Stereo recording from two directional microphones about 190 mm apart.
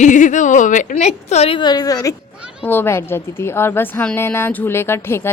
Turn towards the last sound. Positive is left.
turn(degrees=15)  # may be behind; listen again after turning